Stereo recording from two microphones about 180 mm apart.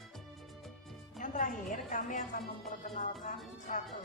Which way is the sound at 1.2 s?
45° left (ahead or behind).